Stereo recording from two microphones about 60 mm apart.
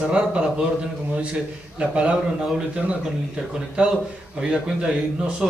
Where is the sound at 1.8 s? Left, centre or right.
Centre.